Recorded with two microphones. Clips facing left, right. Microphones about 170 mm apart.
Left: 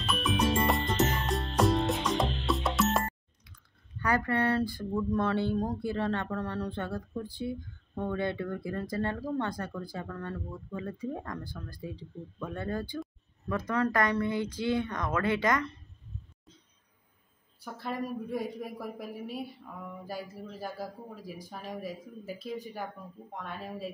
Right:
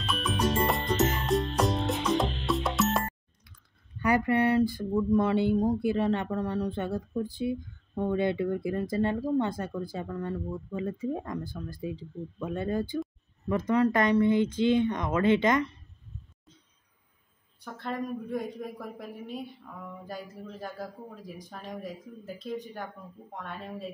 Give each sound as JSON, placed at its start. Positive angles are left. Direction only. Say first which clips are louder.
{"t": 0.0, "sound": "music", "louder": "even", "side_deg": 0}
{"t": 4.0, "sound": "speech", "louder": "right 4 dB", "side_deg": -20}
{"t": 17.7, "sound": "speech", "louder": "right 1 dB", "side_deg": 5}